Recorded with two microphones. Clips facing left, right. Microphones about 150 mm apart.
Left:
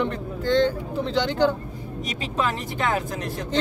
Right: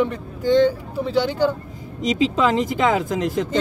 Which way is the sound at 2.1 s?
90° right.